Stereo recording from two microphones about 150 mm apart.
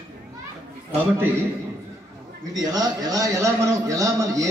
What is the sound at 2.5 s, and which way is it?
A man's voice, 25° right (ahead or behind).